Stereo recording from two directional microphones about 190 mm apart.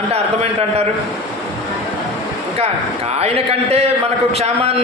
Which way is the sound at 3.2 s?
30° right (ahead or behind).